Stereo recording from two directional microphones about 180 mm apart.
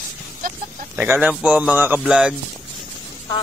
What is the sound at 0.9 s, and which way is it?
Speech, 10° right (ahead or behind).